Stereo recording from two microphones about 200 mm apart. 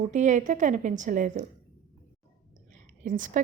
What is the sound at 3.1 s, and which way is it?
Speech, 40° right (ahead or behind).